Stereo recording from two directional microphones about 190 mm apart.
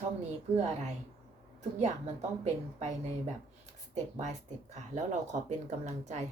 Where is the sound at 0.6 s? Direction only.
35° right (ahead or behind).